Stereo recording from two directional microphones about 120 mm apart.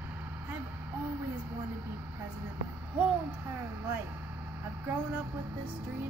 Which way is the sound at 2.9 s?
15° right (ahead or behind).